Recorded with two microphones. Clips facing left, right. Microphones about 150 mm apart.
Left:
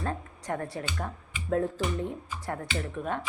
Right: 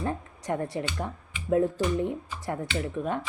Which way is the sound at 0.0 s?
15° right (ahead or behind).